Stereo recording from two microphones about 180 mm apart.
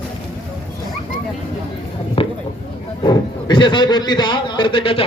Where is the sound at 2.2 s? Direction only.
30° left (ahead or behind).